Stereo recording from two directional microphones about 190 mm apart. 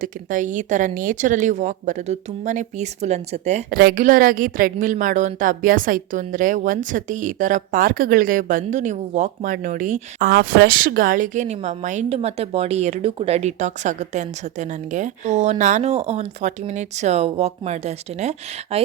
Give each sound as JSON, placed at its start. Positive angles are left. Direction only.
{"t": 0.0, "sound": "a woman's voice", "side_deg": -45}
{"t": 3.7, "sound": "a woman's voice", "side_deg": -50}